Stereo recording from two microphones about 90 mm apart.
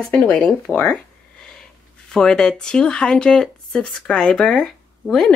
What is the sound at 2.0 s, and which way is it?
Speech, 10° left (ahead or behind).